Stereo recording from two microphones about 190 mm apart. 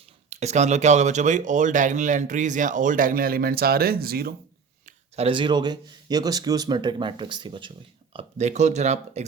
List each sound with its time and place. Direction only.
0.3 s speech: 35° right (ahead or behind); by 4.4 s 55° right (ahead or behind)
4.9 s speech: 30° right (ahead or behind)
8.1 s speech: 35° right (ahead or behind)